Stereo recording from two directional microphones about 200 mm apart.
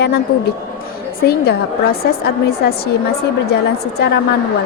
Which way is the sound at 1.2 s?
50° left (ahead or behind).